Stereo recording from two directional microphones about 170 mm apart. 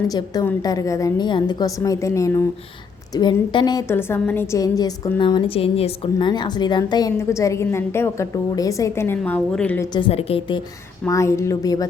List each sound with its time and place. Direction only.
0.1 s a woman's voice: 20° left (ahead or behind)
9.9 s a woman's voice: 35° left (ahead or behind)
11.0 s a woman's voice: 15° left (ahead or behind)